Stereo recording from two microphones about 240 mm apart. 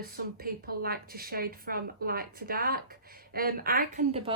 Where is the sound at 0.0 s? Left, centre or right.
Right.